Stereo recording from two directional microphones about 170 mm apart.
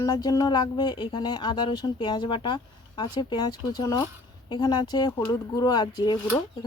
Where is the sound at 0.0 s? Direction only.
20° left (ahead or behind).